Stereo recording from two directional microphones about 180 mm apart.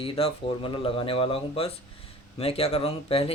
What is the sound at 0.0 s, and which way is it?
Speech, 30° left (ahead or behind).